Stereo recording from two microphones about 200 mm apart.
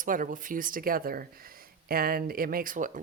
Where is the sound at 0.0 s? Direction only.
40° right (ahead or behind).